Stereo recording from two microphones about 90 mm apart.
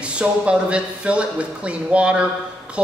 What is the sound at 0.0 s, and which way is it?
A man's voice, 10° right (ahead or behind).